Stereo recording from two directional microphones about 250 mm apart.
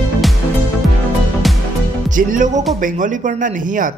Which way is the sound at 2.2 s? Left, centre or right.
Right.